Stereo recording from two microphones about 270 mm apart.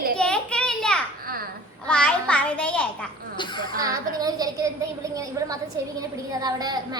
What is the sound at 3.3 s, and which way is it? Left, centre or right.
Speech, centre.